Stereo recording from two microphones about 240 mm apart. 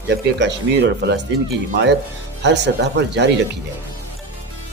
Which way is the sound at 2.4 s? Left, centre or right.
Right.